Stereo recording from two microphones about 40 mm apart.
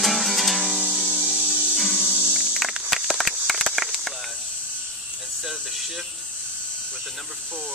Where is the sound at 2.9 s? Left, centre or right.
Centre.